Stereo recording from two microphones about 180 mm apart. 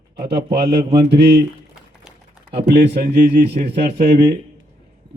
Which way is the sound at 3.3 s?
65° right (ahead or behind).